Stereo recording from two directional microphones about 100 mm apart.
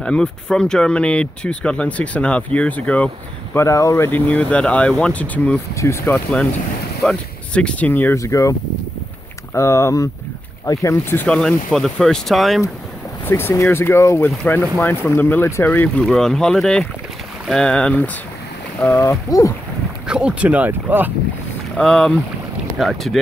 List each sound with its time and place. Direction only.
0.0 s speech: 10° left (ahead or behind)
3.5 s speech: 30° left (ahead or behind)
4.1 s speech: 15° left (ahead or behind)
5.8 s speech: 25° left (ahead or behind)
7.0 s speech: 10° left (ahead or behind)
8.2 s speech: 35° left (ahead or behind)
11.1 s speech: 10° left (ahead or behind)
13.2 s speech: 25° left (ahead or behind)
16.0 s speech: 5° left (ahead or behind); by 19.5 s 30° left (ahead or behind)
20.1 s speech: 10° right (ahead or behind)
21.7 s speech: 5° left (ahead or behind)